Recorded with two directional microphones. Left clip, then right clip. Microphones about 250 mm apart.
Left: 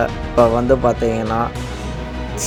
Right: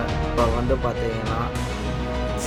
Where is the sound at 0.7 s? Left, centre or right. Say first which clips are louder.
Left 9 dB; left.